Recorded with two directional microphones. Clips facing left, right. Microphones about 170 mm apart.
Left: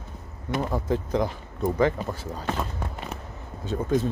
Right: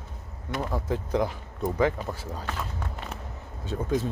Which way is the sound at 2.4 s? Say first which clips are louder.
Left 7 dB; 20° left (ahead or behind).